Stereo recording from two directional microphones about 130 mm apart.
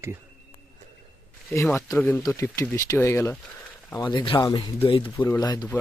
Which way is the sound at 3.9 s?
30° left (ahead or behind).